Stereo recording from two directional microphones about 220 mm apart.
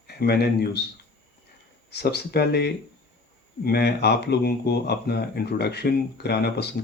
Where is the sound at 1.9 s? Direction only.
50° left (ahead or behind).